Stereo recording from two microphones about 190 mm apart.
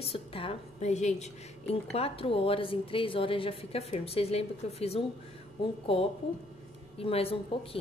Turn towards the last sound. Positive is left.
turn(degrees=30)  # may be behind; listen again after turning